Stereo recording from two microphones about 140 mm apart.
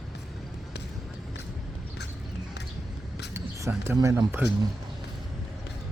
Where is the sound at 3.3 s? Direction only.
20° right (ahead or behind).